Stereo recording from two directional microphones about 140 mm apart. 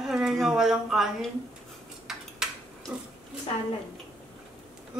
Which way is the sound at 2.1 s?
Centre (ahead or behind).